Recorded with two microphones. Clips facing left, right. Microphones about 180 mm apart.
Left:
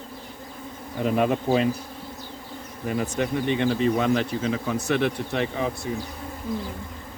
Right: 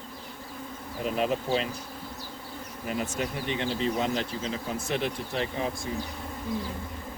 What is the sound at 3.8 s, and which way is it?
Speech, 60° left (ahead or behind).